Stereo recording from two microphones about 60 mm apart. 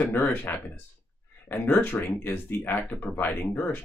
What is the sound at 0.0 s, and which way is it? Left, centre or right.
Speech, left.